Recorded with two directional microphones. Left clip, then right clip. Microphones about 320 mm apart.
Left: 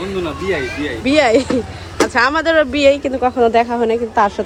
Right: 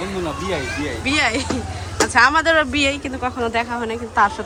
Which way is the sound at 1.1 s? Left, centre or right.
Centre.